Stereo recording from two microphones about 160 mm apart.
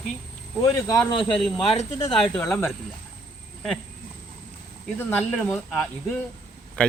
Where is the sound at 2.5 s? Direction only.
5° left (ahead or behind).